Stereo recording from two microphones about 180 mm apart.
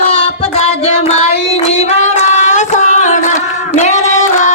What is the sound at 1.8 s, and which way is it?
Singing, 40° left (ahead or behind).